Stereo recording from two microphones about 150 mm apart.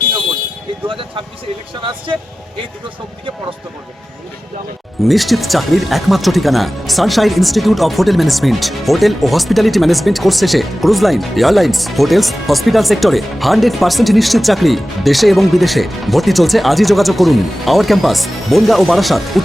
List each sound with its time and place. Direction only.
0.9 s speech: 35° right (ahead or behind)
5.0 s speech: centre (ahead or behind)